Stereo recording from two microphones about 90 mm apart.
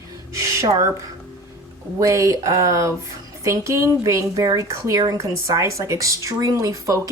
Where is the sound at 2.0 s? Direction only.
35° right (ahead or behind).